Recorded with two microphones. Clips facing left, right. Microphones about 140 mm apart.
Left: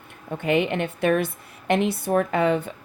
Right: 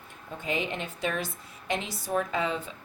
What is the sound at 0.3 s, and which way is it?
Speech, 65° left (ahead or behind).